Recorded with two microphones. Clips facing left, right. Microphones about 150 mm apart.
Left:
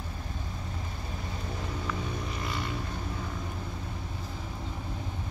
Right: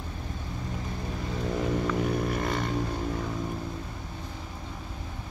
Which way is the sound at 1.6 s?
70° right (ahead or behind).